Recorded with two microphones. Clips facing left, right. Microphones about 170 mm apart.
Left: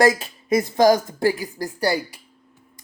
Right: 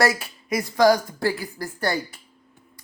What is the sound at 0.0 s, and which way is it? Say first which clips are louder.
A woman's voice: left 4 dB; 20° left (ahead or behind).